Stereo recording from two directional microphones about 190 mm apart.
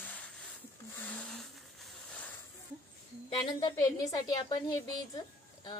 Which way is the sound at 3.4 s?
25° left (ahead or behind).